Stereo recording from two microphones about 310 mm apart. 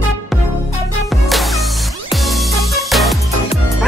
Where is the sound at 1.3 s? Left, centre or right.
Centre.